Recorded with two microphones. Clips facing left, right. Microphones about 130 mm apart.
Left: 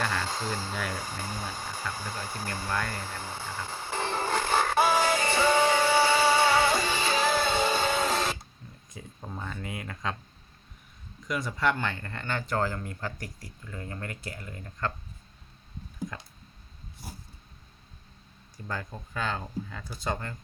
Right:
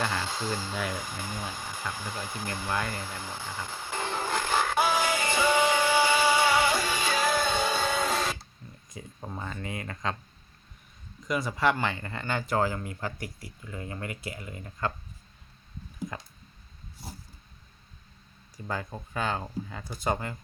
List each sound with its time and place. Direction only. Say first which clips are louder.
0.4 s speech: right 1 dB; 35° left (ahead or behind)
2.9 s music: even; 35° left (ahead or behind)
6.7 s music: left 1 dB; 10° right (ahead or behind)
7.3 s music: left 1 dB; 10° left (ahead or behind)
7.9 s printer: left 1 dB; centre (ahead or behind)
8.9 s speech: right 1 dB; 5° right (ahead or behind)
11.3 s speech: right 2 dB; 5° right (ahead or behind)
18.5 s speech: right 2 dB; 10° right (ahead or behind)